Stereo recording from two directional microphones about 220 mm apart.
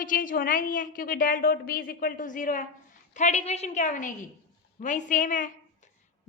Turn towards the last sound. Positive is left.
turn(degrees=35)  # may be behind; listen again after turning